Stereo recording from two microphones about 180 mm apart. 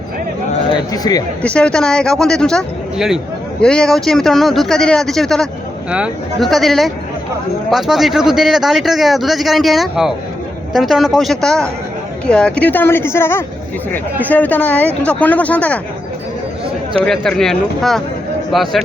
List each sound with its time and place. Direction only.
1.1 s speech: 20° left (ahead or behind)
1.4 s a man's voice: 5° left (ahead or behind)
16.9 s a man's voice: 5° left (ahead or behind)